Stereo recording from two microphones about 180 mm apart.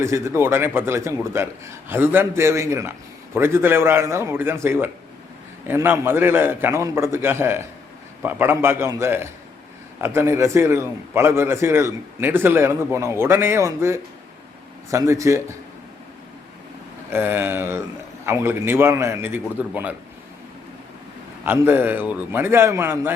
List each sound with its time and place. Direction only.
0.0 s a man's voice: 15° right (ahead or behind)
17.1 s a man's voice: 10° right (ahead or behind)
21.4 s a man's voice: 10° right (ahead or behind)